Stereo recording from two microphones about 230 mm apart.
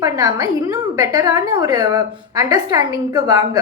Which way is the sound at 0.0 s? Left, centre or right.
Centre.